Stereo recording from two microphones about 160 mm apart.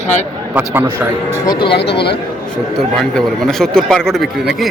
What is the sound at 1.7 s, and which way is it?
Speech, 90° left.